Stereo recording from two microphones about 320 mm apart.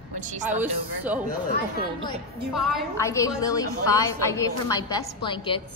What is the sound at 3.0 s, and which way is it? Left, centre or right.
A woman's voice, centre.